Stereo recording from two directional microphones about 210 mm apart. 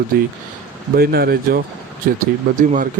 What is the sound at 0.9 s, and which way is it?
Speech, 45° right (ahead or behind).